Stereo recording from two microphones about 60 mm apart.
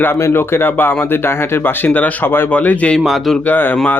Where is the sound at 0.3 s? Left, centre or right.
Left.